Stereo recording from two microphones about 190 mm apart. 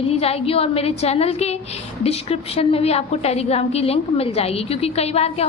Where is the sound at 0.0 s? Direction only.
30° left (ahead or behind).